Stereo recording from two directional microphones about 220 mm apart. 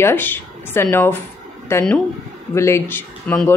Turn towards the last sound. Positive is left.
turn(degrees=10)  # may be behind; listen again after turning